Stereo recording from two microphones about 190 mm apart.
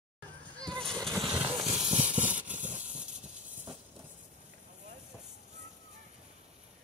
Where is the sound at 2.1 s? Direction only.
10° right (ahead or behind).